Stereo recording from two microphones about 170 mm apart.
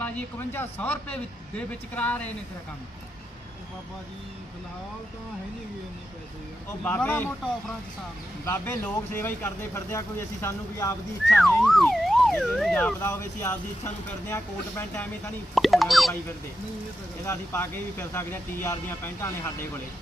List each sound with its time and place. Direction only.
0.0 s speech: 10° left (ahead or behind)
6.8 s speech: 10° left (ahead or behind)
8.4 s speech: 10° left (ahead or behind)
11.3 s speech: centre (ahead or behind)
15.5 s speech: centre (ahead or behind)
17.2 s speech: 15° left (ahead or behind)